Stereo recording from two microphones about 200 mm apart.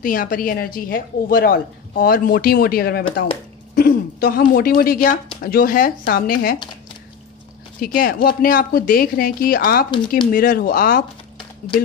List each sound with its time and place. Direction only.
0.0 s a woman's voice: 45° left (ahead or behind)
7.8 s a woman's voice: 45° left (ahead or behind)